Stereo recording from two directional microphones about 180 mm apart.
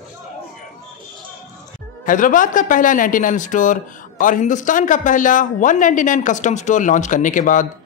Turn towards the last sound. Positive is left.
turn(degrees=45)  # may be behind; listen again after turning